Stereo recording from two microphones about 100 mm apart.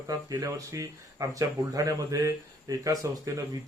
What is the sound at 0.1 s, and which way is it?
Speech, 35° right (ahead or behind).